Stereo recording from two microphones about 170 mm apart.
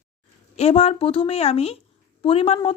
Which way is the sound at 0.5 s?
40° left (ahead or behind).